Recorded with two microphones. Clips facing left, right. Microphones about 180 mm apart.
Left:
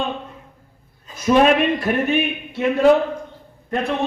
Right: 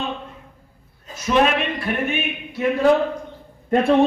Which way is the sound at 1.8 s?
35° left (ahead or behind).